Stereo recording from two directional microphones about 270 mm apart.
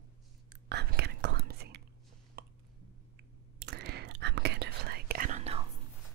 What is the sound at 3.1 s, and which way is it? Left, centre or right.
Whispering, right.